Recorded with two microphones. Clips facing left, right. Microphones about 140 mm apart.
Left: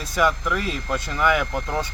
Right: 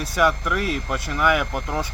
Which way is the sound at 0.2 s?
10° right (ahead or behind).